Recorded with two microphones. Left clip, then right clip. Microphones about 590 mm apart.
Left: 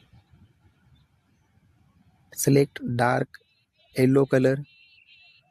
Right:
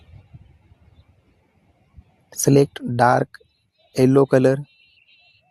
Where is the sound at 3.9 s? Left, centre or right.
Left.